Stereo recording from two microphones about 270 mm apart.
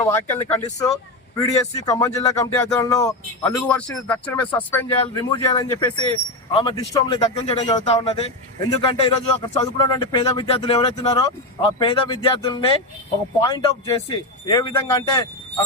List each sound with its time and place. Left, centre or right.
0.0 s a man's voice: centre
1.9 s a man's voice: centre